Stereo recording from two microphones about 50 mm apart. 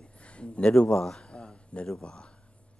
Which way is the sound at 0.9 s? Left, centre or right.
Centre.